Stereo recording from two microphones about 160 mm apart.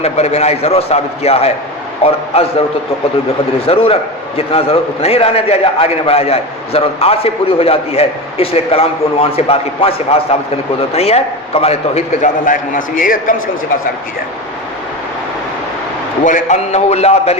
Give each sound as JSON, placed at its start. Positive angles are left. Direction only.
{"t": 0.0, "sound": "a man's voice", "side_deg": 45}
{"t": 3.7, "sound": "a man's voice", "side_deg": 35}
{"t": 16.2, "sound": "a man's voice", "side_deg": 50}